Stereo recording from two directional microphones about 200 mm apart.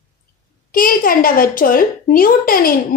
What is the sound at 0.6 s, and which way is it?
A woman's voice, 45° left (ahead or behind).